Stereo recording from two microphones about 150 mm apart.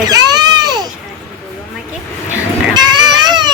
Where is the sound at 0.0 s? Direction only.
25° right (ahead or behind).